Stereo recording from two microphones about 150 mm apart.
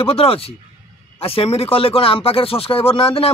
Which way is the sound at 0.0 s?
40° left (ahead or behind).